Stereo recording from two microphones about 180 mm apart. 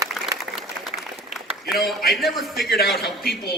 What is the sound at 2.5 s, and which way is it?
Speech, 60° left (ahead or behind).